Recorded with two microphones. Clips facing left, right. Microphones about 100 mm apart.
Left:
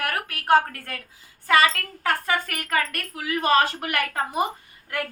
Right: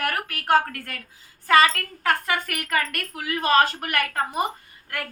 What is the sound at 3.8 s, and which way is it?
Speech, 15° left (ahead or behind).